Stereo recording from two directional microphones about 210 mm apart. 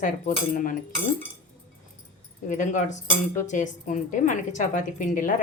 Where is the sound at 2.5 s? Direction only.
35° left (ahead or behind).